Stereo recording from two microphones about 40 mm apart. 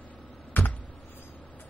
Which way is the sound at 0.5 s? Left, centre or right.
Left.